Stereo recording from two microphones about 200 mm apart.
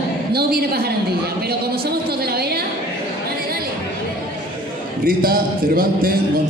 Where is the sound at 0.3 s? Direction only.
50° right (ahead or behind).